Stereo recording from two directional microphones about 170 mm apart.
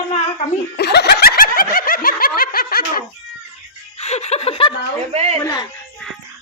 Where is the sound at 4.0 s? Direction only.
40° left (ahead or behind).